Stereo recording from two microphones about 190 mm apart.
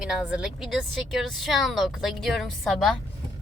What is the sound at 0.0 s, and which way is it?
A woman's voice, 5° right (ahead or behind).